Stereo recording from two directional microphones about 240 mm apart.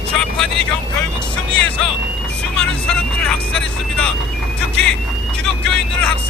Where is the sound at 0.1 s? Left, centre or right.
Centre.